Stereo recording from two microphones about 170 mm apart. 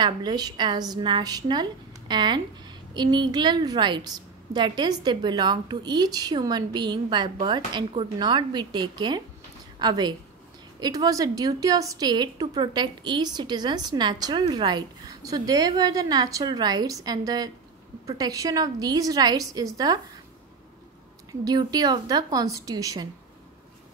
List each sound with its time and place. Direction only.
0.0 s a woman's voice: 25° right (ahead or behind)
21.3 s a woman's voice: 25° right (ahead or behind)